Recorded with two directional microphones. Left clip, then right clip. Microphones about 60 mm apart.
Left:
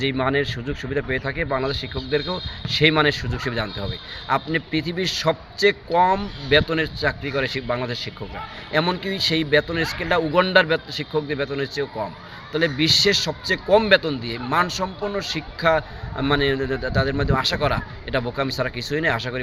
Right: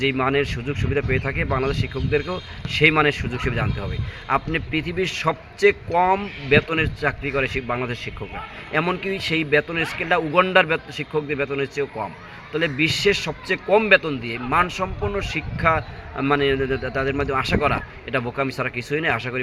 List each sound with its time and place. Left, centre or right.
0.0 s a man's voice: centre
13.2 s a man's voice: left